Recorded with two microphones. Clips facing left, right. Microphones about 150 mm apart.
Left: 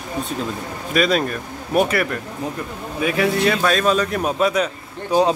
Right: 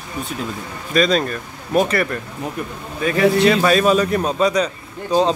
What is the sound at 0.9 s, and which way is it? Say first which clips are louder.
Speech: right 1 dB; 5° left (ahead or behind).